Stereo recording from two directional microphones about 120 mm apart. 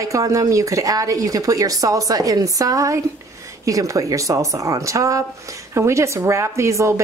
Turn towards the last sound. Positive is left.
turn(degrees=-25)  # may be behind; listen again after turning